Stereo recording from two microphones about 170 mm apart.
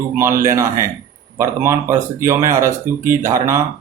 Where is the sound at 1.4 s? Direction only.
15° right (ahead or behind).